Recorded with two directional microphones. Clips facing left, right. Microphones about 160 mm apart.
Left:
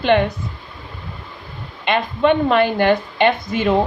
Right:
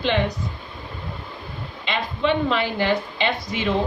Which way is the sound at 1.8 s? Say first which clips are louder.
Left 7 dB; 55° left (ahead or behind).